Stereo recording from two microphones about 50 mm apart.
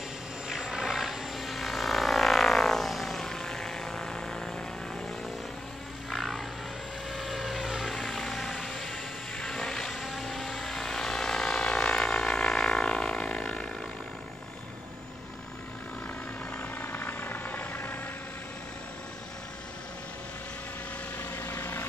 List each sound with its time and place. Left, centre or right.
0.5 s vehicle: centre
6.0 s frog: centre
7.1 s vehicle: centre
16.5 s helicopter: left
21.2 s vehicle: left